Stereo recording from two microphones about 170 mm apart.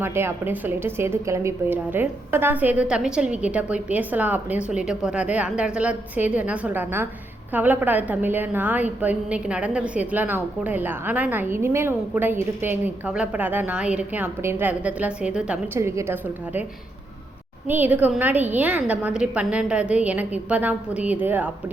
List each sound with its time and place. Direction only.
0.0 s a woman's voice: 15° right (ahead or behind)
17.7 s a woman's voice: 10° right (ahead or behind)